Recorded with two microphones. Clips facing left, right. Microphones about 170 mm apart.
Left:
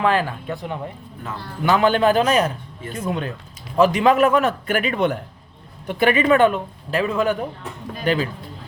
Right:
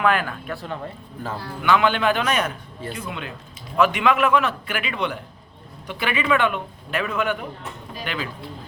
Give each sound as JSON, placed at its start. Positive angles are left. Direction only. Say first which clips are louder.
{"t": 0.0, "sound": "speech", "louder": "left 2 dB", "side_deg": 30}
{"t": 1.6, "sound": "a man's voice", "louder": "left 3 dB", "side_deg": 40}